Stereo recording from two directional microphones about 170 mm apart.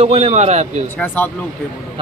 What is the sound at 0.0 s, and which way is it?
Speech, 35° right (ahead or behind).